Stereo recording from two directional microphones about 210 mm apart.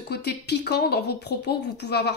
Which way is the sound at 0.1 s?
50° left (ahead or behind).